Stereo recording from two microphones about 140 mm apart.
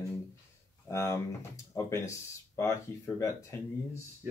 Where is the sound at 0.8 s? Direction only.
20° left (ahead or behind).